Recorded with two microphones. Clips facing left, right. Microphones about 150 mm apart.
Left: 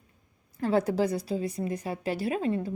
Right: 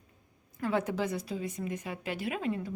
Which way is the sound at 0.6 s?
35° left (ahead or behind).